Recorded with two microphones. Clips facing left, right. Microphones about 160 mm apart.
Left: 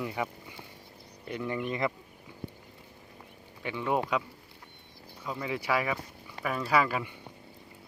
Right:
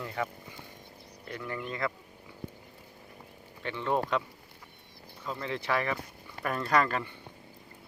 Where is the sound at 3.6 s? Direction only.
10° left (ahead or behind).